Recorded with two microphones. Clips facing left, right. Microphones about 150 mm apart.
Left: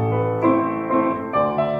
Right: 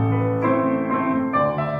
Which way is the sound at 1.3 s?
20° left (ahead or behind).